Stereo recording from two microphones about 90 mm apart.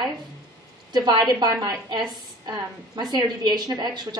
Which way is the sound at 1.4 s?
40° right (ahead or behind).